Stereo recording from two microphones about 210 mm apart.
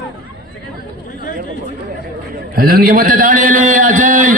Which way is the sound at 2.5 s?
45° right (ahead or behind).